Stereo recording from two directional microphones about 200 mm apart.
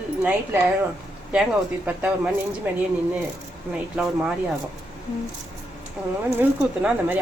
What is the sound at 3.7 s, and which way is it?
Speech, 5° right (ahead or behind).